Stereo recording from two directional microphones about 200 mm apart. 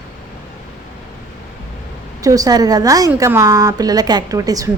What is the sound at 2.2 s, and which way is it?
A woman's voice, 15° right (ahead or behind).